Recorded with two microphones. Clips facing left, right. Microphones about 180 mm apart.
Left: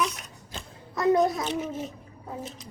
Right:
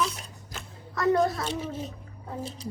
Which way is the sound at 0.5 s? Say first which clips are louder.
Left 1 dB; 20° left (ahead or behind).